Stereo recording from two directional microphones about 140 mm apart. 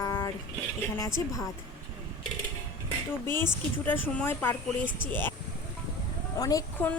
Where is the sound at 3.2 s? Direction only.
15° left (ahead or behind).